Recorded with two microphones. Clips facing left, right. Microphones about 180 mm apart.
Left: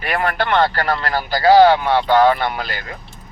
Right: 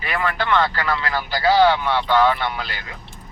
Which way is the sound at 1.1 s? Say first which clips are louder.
Left 6 dB; 45° left (ahead or behind).